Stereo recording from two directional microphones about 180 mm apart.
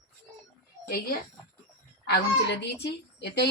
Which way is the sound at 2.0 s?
65° left (ahead or behind).